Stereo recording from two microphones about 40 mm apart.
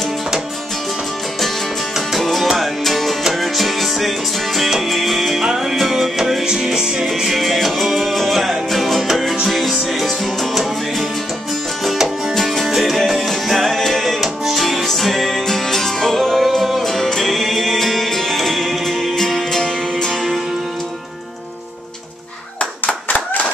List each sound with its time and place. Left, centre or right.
2.0 s music: centre
7.2 s music: centre
11.8 s music: centre
16.3 s music: centre
16.8 s music: centre
23.0 s a sound: left